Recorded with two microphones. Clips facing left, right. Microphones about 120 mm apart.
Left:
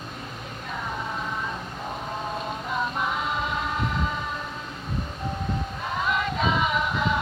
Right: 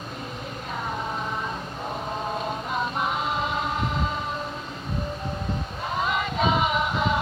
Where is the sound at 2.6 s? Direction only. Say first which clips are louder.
Left 1 dB; 20° right (ahead or behind).